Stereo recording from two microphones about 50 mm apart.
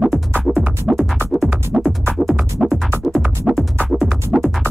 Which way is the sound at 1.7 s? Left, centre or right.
Right.